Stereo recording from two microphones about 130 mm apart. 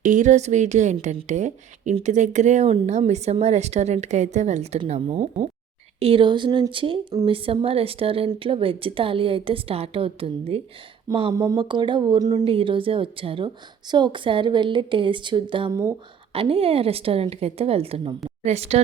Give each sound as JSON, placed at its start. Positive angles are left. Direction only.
{"t": 0.0, "sound": "a woman's voice", "side_deg": -75}
{"t": 5.0, "sound": "a woman's voice", "side_deg": -35}
{"t": 12.5, "sound": "a woman's voice", "side_deg": -45}
{"t": 15.7, "sound": "speech", "side_deg": -25}
{"t": 16.3, "sound": "a woman's voice", "side_deg": -45}